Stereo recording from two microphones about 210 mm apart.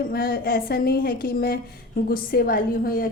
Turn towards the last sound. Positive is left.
turn(degrees=45)  # may be behind; listen again after turning